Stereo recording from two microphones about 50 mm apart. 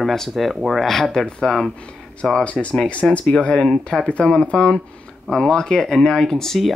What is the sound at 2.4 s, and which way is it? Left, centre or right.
Speech, left.